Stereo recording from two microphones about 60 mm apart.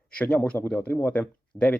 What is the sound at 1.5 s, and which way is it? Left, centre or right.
Speech, left.